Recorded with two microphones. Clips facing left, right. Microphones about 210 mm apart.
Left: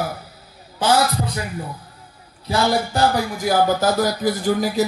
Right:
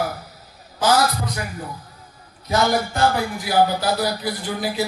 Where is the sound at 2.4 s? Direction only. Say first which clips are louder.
Even; 30° left (ahead or behind).